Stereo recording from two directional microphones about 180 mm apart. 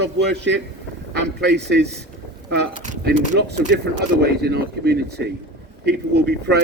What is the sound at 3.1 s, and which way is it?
A man's voice, 65° right (ahead or behind).